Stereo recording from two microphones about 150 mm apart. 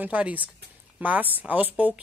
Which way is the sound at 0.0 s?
10° right (ahead or behind).